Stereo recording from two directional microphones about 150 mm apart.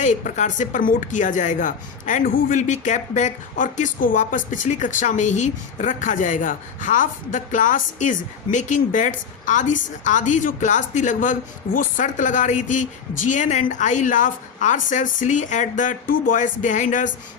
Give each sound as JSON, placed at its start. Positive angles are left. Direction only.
{"t": 0.0, "sound": "a woman's voice", "side_deg": 55}